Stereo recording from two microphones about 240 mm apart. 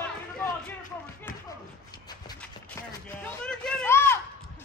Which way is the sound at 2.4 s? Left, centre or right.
Centre.